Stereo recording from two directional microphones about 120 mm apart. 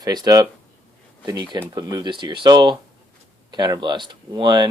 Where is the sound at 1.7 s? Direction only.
35° right (ahead or behind).